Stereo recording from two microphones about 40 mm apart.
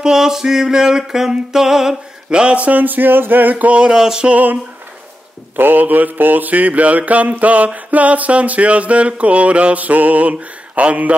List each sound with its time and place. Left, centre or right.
0.0 s music: centre
2.5 s mantra: right
2.8 s music: right
3.9 s music: centre
5.6 s mantra: right